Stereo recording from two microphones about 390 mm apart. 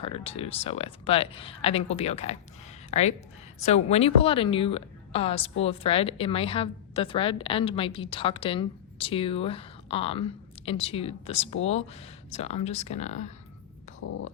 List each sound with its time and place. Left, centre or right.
0.0 s a woman's voice: centre